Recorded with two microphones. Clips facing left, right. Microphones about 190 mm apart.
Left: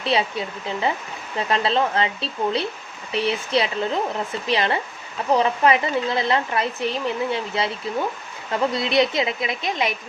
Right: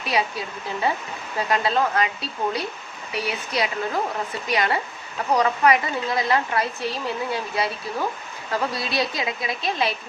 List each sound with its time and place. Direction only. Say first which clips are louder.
0.0 s speech: left 3 dB; 25° left (ahead or behind)
8.7 s speech: left 6 dB; 20° left (ahead or behind)